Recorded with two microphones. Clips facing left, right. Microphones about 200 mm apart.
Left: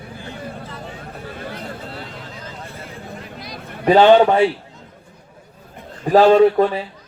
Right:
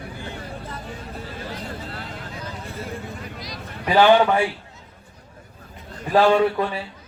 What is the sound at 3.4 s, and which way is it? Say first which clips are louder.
Vehicle: left 4 dB; 55° left (ahead or behind).